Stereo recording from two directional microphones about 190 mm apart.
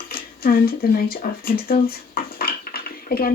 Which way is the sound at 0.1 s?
50° left (ahead or behind).